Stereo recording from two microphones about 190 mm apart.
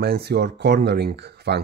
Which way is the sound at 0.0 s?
60° right (ahead or behind).